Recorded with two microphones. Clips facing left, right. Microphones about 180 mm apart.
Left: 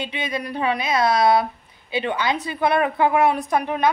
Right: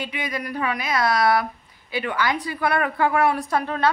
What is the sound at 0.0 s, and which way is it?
A woman's voice, 25° left (ahead or behind).